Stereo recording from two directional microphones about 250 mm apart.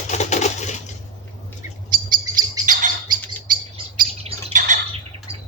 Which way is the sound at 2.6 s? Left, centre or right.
Right.